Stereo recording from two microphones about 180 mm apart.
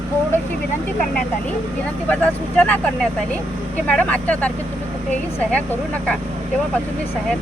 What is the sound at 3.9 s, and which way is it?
Speech, 5° left (ahead or behind).